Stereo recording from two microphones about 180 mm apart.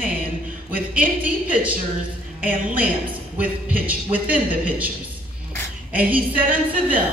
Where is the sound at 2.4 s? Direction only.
10° right (ahead or behind).